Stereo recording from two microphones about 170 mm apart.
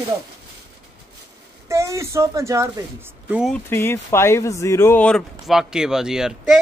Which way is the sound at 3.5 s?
15° left (ahead or behind).